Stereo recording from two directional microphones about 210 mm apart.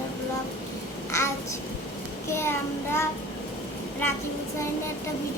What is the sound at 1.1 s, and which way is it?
Babbling, 15° left (ahead or behind).